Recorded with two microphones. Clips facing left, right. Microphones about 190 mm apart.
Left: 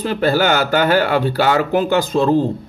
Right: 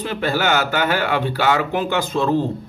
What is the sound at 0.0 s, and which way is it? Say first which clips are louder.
Speech: left 5 dB; 40° left (ahead or behind).